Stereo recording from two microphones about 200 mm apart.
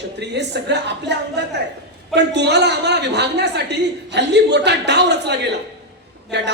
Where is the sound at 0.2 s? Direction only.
60° right (ahead or behind).